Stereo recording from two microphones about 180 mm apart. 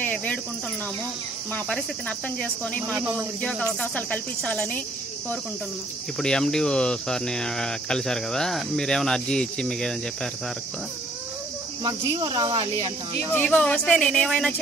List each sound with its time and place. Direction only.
0.0 s cricket: 10° left (ahead or behind)
1.5 s speech: 5° left (ahead or behind)
3.0 s cricket: 10° right (ahead or behind)
3.3 s speech: 5° left (ahead or behind)
6.1 s speech: 5° left (ahead or behind)
11.8 s cricket: 20° right (ahead or behind)
12.7 s speech: 35° right (ahead or behind)
13.4 s speech: 5° left (ahead or behind)